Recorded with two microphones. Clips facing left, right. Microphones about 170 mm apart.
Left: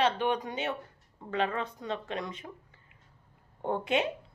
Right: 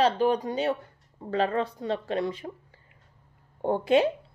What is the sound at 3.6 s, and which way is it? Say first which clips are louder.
Speech: right 7 dB; 35° right (ahead or behind).